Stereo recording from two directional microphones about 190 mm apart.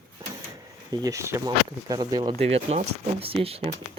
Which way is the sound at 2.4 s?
35° right (ahead or behind).